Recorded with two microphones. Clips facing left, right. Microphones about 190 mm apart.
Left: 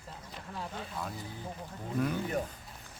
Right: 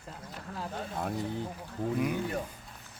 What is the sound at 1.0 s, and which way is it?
Speech, 55° right (ahead or behind).